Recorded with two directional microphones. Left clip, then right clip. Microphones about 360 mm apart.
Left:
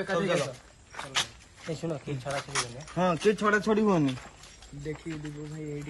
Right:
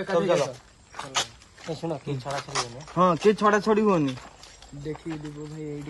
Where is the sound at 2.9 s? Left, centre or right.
Right.